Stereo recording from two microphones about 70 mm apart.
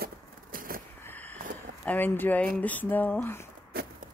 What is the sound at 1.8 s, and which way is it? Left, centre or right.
Speech, left.